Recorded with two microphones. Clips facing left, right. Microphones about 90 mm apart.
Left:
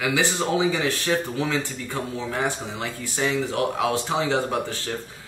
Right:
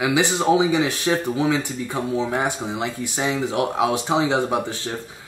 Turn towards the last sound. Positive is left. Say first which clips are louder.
# right 3 dB
turn(degrees=-20)  # may be behind; listen again after turning